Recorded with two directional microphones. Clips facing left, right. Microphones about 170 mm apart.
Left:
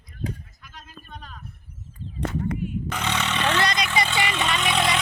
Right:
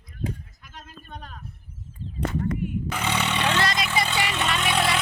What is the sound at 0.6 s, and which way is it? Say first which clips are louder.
Speech: right 1 dB; 50° right (ahead or behind).